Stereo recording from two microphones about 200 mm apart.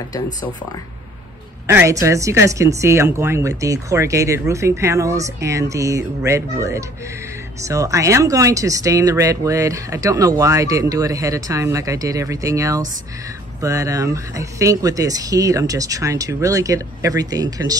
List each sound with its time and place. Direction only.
1.7 s speech: 15° right (ahead or behind)